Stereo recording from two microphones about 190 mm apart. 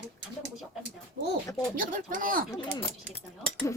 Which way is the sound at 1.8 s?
45° right (ahead or behind).